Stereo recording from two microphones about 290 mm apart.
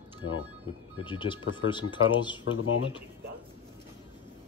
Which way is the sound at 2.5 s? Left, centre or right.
Left.